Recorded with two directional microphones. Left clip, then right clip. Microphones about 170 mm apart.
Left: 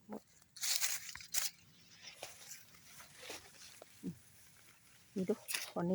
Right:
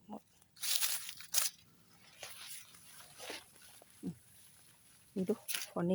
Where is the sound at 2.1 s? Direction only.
5° right (ahead or behind).